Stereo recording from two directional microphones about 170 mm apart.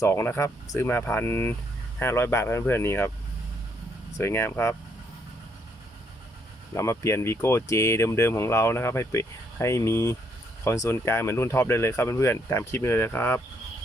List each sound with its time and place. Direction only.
0.0 s speech: 15° left (ahead or behind)
4.2 s speech: 15° left (ahead or behind)
6.7 s speech: 15° left (ahead or behind)